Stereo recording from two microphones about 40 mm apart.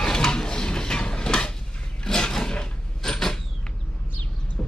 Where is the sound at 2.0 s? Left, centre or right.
Centre.